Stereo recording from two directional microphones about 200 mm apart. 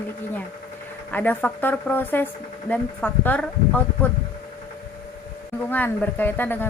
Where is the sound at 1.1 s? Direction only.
10° left (ahead or behind).